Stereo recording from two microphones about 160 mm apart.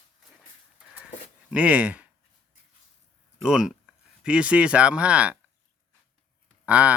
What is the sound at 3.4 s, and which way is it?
Speech, 5° right (ahead or behind).